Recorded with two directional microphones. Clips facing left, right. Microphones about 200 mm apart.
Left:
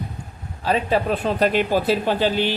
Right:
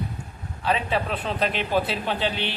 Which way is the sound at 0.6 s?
40° left (ahead or behind).